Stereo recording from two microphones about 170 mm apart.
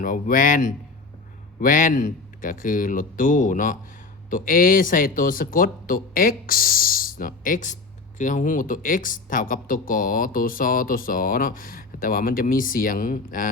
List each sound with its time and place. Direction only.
0.0 s speech: 55° left (ahead or behind)